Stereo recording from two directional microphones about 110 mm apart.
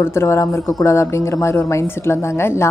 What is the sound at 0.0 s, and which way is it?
A woman's voice, 25° left (ahead or behind).